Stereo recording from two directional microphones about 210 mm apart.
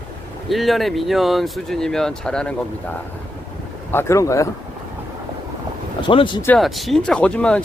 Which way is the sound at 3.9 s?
10° left (ahead or behind).